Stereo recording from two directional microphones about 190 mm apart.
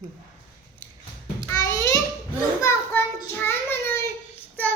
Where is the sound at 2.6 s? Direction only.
10° left (ahead or behind).